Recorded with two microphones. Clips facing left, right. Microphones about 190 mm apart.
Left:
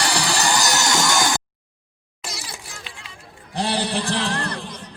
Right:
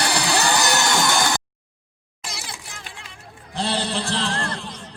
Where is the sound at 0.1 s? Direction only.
60° right (ahead or behind).